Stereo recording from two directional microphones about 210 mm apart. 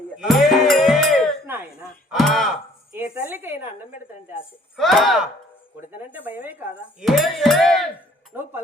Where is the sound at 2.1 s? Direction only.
Centre (ahead or behind).